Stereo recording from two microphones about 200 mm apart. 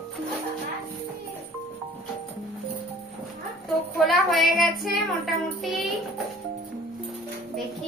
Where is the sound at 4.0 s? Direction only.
Centre (ahead or behind).